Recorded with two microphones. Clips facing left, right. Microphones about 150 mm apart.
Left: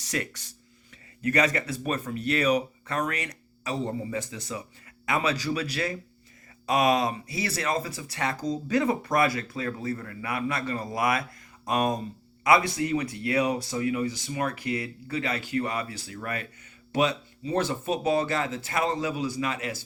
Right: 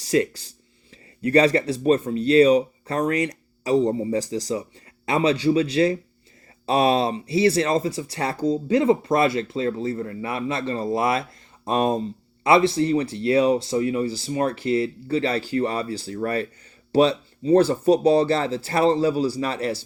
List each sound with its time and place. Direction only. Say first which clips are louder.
0.0 s speech: right 11 dB; 30° right (ahead or behind)